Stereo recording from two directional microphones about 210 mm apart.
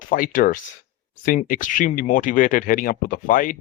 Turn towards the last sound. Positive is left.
turn(degrees=40)  # may be behind; listen again after turning